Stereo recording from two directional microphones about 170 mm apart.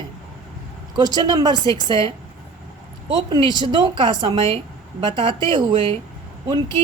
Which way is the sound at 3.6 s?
25° right (ahead or behind).